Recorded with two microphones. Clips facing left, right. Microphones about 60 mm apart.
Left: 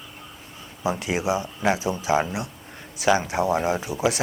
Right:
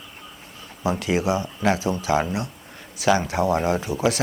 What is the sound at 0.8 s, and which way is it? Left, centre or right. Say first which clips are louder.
Speech: right 2 dB; centre.